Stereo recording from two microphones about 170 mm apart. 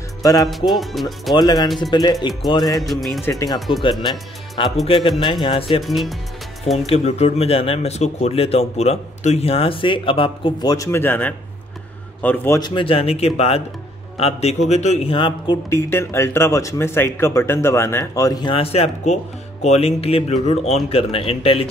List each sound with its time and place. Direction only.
0.2 s music: 20° left (ahead or behind)
0.5 s speech: centre (ahead or behind)
1.3 s speech: 25° left (ahead or behind)
2.8 s speech: centre (ahead or behind)
3.3 s speech: 20° left (ahead or behind)
3.5 s speech: centre (ahead or behind)
4.8 s speech: 30° left (ahead or behind)
5.8 s speech: centre (ahead or behind)
6.9 s speech: 40° left (ahead or behind); by 12.5 s 10° left (ahead or behind)
12.5 s speech: 25° left (ahead or behind)
15.7 s speech: 15° left (ahead or behind); by 21.6 s 35° left (ahead or behind)